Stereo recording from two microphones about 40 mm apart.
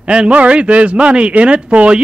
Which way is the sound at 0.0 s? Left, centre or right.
Right.